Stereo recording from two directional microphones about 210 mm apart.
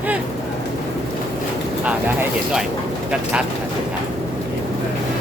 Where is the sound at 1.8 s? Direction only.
5° right (ahead or behind).